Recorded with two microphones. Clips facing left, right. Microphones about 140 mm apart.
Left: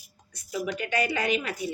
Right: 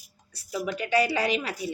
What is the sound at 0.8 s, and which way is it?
Speech, 35° right (ahead or behind).